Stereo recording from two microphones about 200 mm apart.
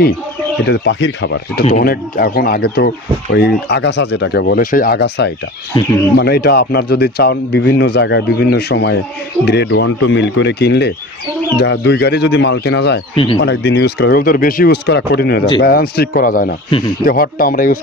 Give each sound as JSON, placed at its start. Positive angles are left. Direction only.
{"t": 0.7, "sound": "speech", "side_deg": 65}
{"t": 1.7, "sound": "speech", "side_deg": 45}
{"t": 13.1, "sound": "speech", "side_deg": 25}
{"t": 13.4, "sound": "speech", "side_deg": 55}